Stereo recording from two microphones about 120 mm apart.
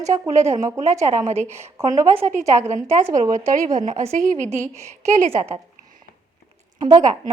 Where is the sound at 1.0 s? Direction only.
80° right.